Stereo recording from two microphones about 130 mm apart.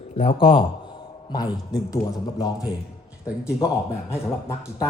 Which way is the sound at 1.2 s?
30° left (ahead or behind).